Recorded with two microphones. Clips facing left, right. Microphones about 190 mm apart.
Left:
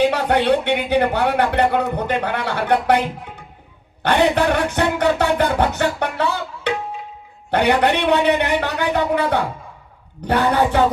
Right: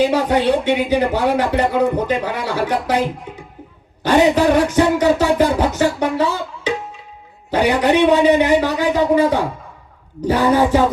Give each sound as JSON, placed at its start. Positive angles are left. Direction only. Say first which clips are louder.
{"t": 0.1, "sound": "speech", "louder": "right 1 dB", "side_deg": 60}
{"t": 6.7, "sound": "tabla", "louder": "right 1 dB", "side_deg": 60}
{"t": 7.5, "sound": "speech", "louder": "right 2 dB", "side_deg": 60}
{"t": 10.2, "sound": "speech", "louder": "right 3 dB", "side_deg": 60}